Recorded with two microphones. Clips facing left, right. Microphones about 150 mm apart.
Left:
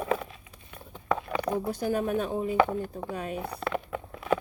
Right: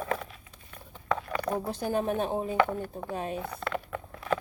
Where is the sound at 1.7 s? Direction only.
30° right (ahead or behind).